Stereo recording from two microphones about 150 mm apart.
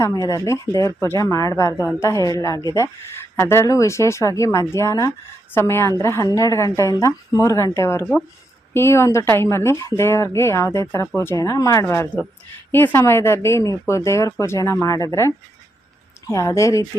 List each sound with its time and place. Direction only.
0.3 s a woman's voice: 20° left (ahead or behind)
16.3 s a woman's voice: 20° left (ahead or behind)